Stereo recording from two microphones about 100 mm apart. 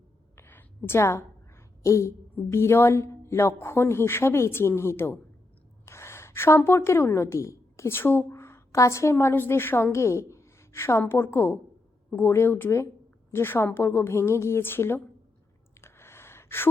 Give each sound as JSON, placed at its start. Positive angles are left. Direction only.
{"t": 0.3, "sound": "a woman's voice", "side_deg": 20}
{"t": 15.8, "sound": "gasp", "side_deg": 25}